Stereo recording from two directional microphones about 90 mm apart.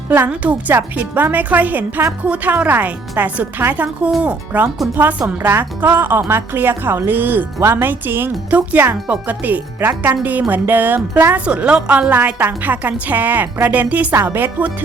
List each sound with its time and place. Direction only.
0.7 s a woman's voice: 20° right (ahead or behind)
5.4 s a woman's voice: 25° right (ahead or behind)